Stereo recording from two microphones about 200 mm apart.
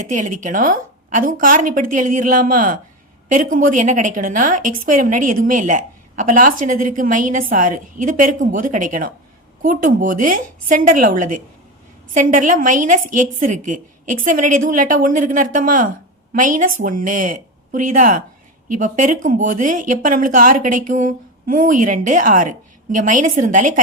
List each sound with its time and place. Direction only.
0.1 s a woman's voice: 40° right (ahead or behind)